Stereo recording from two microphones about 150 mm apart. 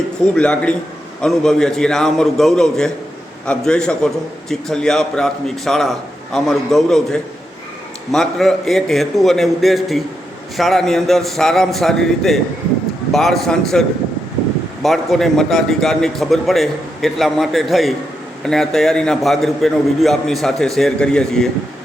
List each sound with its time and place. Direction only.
0.3 s a man's voice: 5° left (ahead or behind)